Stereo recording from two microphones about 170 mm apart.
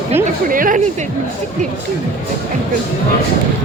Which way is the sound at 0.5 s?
55° right (ahead or behind).